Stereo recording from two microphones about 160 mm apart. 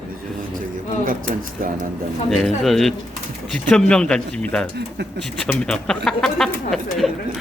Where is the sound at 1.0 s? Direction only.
60° right (ahead or behind).